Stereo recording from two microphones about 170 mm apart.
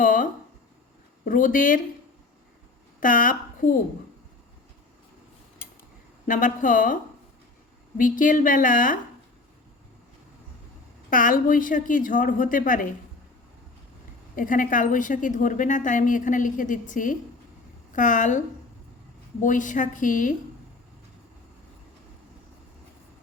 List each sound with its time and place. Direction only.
0.0 s a sound: 55° left (ahead or behind)
1.2 s a woman's voice: 55° left (ahead or behind)
3.0 s a woman's voice: 55° left (ahead or behind)
6.2 s a woman's voice: 50° left (ahead or behind)
11.1 s a woman's voice: 55° left (ahead or behind)
14.3 s a woman's voice: 50° left (ahead or behind)